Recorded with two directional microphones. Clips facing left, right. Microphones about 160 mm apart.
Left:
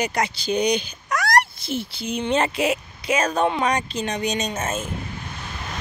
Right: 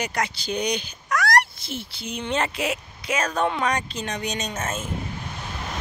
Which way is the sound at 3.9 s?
25° left (ahead or behind).